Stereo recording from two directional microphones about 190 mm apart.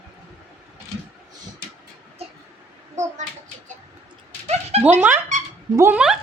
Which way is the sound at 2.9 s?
40° right (ahead or behind).